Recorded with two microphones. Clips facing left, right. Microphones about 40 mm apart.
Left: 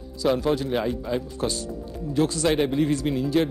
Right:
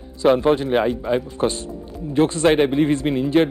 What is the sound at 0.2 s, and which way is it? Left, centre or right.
Speech, right.